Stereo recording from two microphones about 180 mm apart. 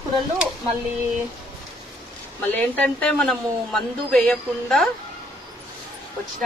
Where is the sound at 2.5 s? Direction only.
10° left (ahead or behind).